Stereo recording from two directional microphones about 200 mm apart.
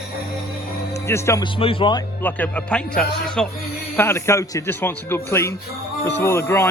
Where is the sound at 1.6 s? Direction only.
25° left (ahead or behind).